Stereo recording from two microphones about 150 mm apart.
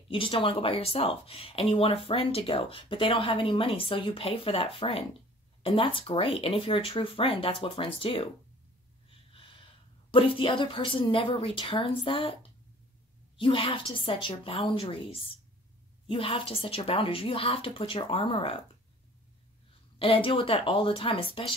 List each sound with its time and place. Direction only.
0.1 s speech: 35° left (ahead or behind)
10.1 s speech: 35° left (ahead or behind)
13.4 s speech: 35° left (ahead or behind)
20.0 s speech: 35° left (ahead or behind)